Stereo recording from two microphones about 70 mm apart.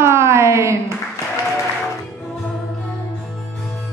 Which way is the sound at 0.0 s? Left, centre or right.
Right.